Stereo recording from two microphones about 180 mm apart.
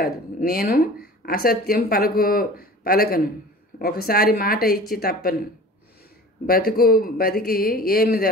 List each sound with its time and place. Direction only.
0.0 s speech: 55° left (ahead or behind)
6.4 s speech: 55° left (ahead or behind)